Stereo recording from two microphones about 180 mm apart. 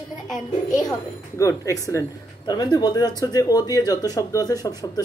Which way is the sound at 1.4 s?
15° left (ahead or behind).